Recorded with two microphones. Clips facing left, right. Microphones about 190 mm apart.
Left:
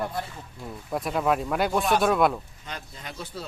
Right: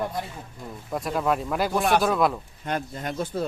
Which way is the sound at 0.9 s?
Centre (ahead or behind).